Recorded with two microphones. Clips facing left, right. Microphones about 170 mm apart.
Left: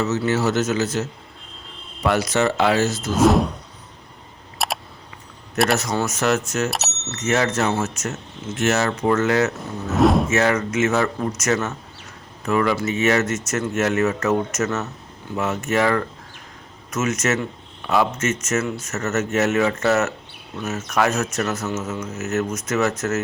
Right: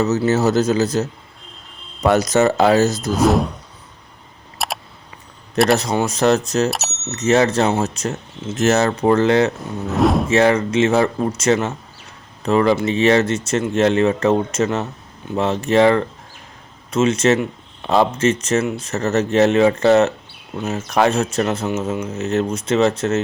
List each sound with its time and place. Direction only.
0.0 s speech: 40° right (ahead or behind)
3.1 s speech: centre (ahead or behind)
4.5 s camera: centre (ahead or behind)
6.1 s speech: 35° right (ahead or behind)
6.7 s speech: centre (ahead or behind)
7.1 s speech: 30° right (ahead or behind)
9.9 s music: centre (ahead or behind)
10.2 s speech: 30° right (ahead or behind)